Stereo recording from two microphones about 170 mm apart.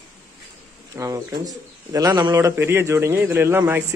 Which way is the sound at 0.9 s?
20° right (ahead or behind).